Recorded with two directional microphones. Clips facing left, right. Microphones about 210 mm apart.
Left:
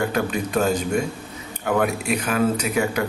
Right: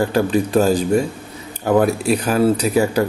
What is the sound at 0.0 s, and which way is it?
A man's voice, 30° right (ahead or behind).